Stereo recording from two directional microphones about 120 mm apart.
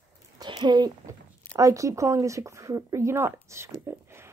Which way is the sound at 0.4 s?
35° right (ahead or behind).